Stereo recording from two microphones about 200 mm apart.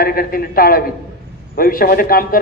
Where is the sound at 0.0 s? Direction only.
45° left (ahead or behind).